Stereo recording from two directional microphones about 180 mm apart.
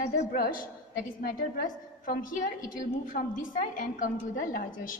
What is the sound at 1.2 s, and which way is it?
A woman's voice, 50° left (ahead or behind).